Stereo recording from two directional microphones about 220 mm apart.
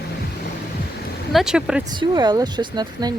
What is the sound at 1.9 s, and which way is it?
Speech, 20° right (ahead or behind).